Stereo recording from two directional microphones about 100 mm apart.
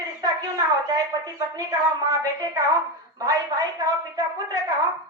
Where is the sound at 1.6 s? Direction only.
40° right (ahead or behind).